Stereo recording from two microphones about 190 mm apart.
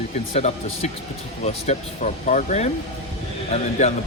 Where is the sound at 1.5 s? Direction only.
35° left (ahead or behind).